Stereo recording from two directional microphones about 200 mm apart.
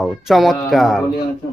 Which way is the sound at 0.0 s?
Centre (ahead or behind).